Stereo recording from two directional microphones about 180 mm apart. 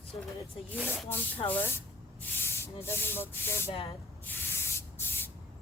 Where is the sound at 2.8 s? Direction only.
10° left (ahead or behind).